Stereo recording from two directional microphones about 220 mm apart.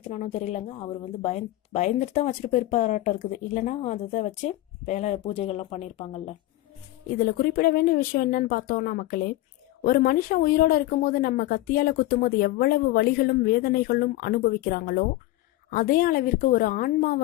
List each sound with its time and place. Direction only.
0.1 s a woman's voice: 30° left (ahead or behind)
7.2 s a woman's voice: 45° left (ahead or behind)